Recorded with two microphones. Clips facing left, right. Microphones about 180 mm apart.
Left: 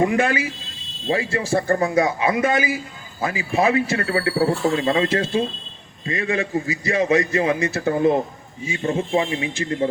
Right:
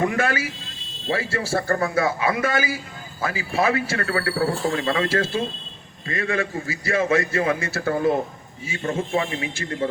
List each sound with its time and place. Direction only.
0.0 s a man's voice: 20° left (ahead or behind)